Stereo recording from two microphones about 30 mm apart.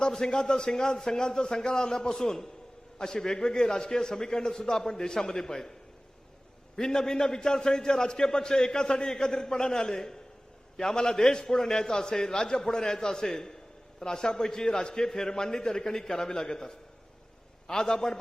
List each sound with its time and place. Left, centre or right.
0.0 s a man's voice: left
6.7 s a man's voice: centre